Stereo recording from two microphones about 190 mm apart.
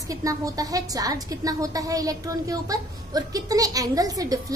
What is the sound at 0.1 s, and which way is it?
A woman's voice, 20° right (ahead or behind).